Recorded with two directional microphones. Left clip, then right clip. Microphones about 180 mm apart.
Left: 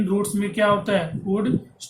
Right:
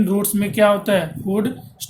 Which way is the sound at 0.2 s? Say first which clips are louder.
Right 6 dB; 55° right (ahead or behind).